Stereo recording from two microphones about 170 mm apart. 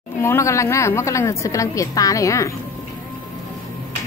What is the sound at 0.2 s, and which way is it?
A woman's voice, 15° left (ahead or behind).